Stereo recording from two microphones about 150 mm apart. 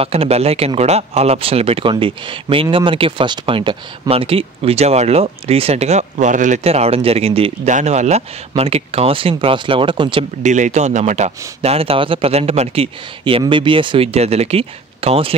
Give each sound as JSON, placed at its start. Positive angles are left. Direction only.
{"t": 0.0, "sound": "speech", "side_deg": -40}
{"t": 7.7, "sound": "speech", "side_deg": -50}
{"t": 10.4, "sound": "speech", "side_deg": -55}